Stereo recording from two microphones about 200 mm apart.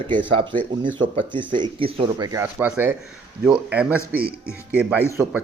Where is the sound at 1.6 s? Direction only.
25° right (ahead or behind).